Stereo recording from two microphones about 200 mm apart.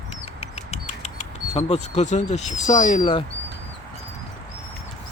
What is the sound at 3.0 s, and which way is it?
Mantra, 25° left (ahead or behind).